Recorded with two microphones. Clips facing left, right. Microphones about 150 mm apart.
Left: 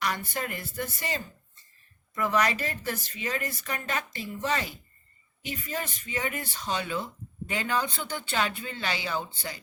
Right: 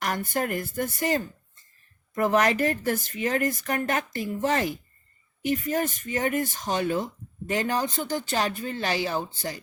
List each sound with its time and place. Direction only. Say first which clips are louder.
0.0 s speech: right 4 dB; 50° right (ahead or behind)